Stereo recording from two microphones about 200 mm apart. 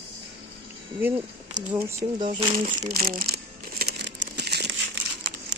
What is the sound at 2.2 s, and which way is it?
Speech, 25° right (ahead or behind).